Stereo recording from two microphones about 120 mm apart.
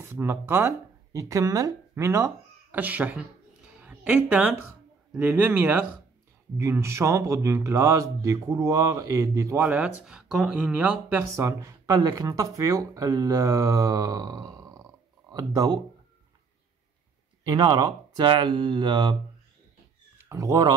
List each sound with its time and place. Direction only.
0.0 s a woman's voice: 20° right (ahead or behind)
9.6 s speech: 10° right (ahead or behind)
11.3 s speech: 25° right (ahead or behind)
17.5 s speech: 40° right (ahead or behind)
20.2 s speech: 25° right (ahead or behind)